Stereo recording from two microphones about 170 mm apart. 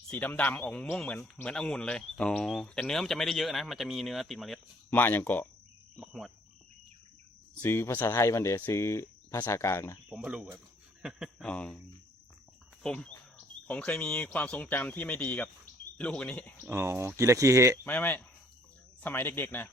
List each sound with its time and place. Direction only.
0.1 s speech: 10° left (ahead or behind)
4.9 s speech: 10° left (ahead or behind)
6.0 s speech: centre (ahead or behind)
7.6 s speech: 15° left (ahead or behind)
10.1 s speech: 10° right (ahead or behind)
12.8 s speech: 5° left (ahead or behind)
16.6 s speech: 15° right (ahead or behind)
17.8 s speech: 10° left (ahead or behind)